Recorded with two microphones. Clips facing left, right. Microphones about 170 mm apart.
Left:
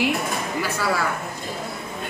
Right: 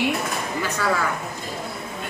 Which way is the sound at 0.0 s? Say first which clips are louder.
Left 1 dB; 5° left (ahead or behind).